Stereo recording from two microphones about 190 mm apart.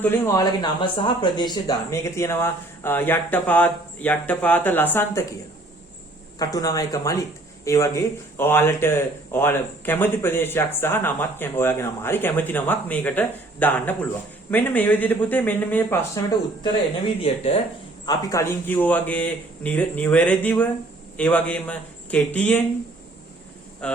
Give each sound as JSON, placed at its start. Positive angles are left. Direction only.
{"t": 0.0, "sound": "speech", "side_deg": 10}
{"t": 0.6, "sound": "speech", "side_deg": 25}
{"t": 6.4, "sound": "speech", "side_deg": 20}
{"t": 17.2, "sound": "speech", "side_deg": 30}
{"t": 18.0, "sound": "speech", "side_deg": 20}
{"t": 23.8, "sound": "speech", "side_deg": 5}